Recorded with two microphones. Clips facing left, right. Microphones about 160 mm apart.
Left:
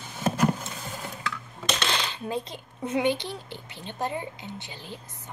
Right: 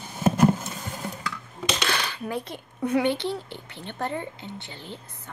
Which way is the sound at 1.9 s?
20° left (ahead or behind).